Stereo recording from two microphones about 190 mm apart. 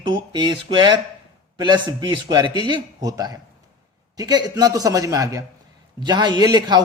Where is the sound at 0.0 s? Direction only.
25° right (ahead or behind).